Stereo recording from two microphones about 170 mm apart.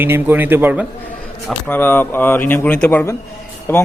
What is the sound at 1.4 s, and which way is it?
Speech, 10° left (ahead or behind).